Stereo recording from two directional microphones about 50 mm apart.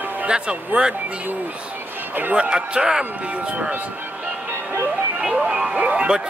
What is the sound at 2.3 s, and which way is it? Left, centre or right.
Speech, right.